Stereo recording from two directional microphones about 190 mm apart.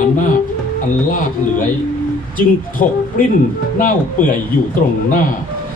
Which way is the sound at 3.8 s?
45° left (ahead or behind).